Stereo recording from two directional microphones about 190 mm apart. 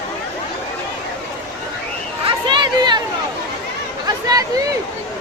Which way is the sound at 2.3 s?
25° right (ahead or behind).